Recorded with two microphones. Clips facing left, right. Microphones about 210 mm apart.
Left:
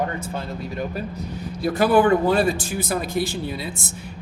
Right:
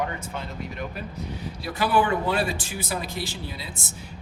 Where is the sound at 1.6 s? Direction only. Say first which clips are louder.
Left 6 dB; 45° left (ahead or behind).